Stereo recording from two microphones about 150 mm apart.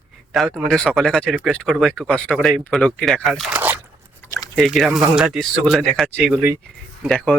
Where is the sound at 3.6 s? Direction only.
10° right (ahead or behind).